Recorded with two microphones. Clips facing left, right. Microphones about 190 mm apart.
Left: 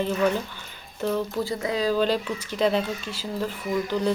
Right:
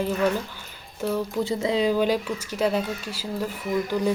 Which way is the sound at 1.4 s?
25° right (ahead or behind).